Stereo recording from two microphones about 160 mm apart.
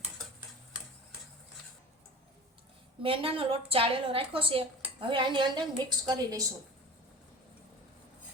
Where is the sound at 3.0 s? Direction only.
35° right (ahead or behind).